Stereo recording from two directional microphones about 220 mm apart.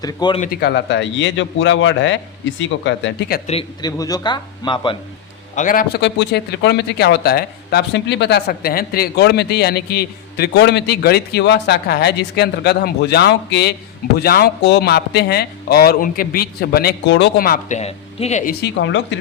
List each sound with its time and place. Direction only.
0.0 s a man's voice: 20° left (ahead or behind)
0.4 s a man's voice: 45° left (ahead or behind)
3.4 s a man's voice: 25° left (ahead or behind)
5.5 s speech: 40° left (ahead or behind)
18.6 s a man's voice: 55° left (ahead or behind)